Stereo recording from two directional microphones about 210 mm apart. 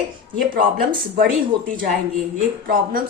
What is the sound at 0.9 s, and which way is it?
Speech, 45° right (ahead or behind).